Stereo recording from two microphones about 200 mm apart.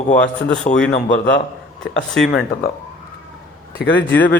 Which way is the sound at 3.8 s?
55° left (ahead or behind).